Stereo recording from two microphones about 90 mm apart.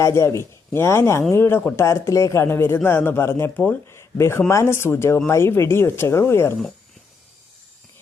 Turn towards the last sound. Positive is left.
turn(degrees=30)  # may be behind; listen again after turning